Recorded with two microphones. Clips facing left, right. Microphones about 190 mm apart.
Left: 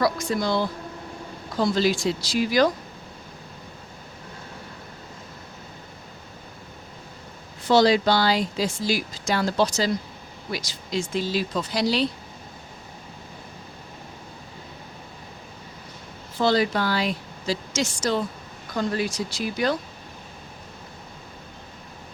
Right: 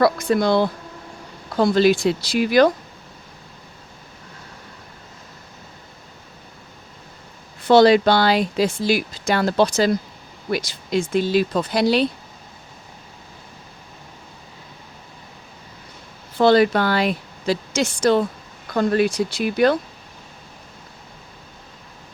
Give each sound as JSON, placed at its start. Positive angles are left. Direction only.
{"t": 0.0, "sound": "speech", "side_deg": -60}
{"t": 7.7, "sound": "speech", "side_deg": -60}
{"t": 16.4, "sound": "speech", "side_deg": -60}